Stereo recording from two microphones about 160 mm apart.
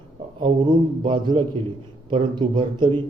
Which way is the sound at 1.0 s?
30° right (ahead or behind).